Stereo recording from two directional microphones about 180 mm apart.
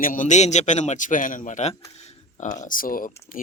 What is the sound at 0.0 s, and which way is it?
Speech, 50° left (ahead or behind).